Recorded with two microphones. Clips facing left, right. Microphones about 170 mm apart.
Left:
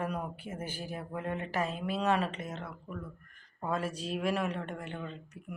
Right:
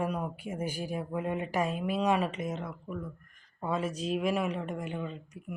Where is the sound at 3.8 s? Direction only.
35° left (ahead or behind).